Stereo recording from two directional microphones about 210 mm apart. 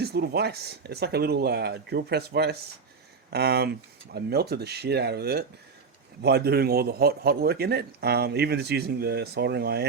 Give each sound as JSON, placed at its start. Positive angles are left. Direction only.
{"t": 0.0, "sound": "a man's voice", "side_deg": -50}